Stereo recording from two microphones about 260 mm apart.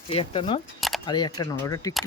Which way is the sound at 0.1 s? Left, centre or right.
Left.